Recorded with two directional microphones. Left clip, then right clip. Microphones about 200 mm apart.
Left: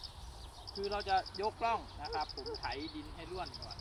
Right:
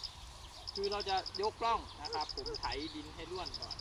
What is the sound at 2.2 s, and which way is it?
Speech, 30° left (ahead or behind).